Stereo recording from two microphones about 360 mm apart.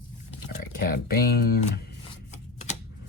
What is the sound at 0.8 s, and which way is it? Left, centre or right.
Speech, left.